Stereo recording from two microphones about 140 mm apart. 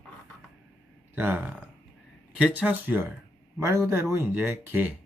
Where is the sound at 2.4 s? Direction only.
10° right (ahead or behind).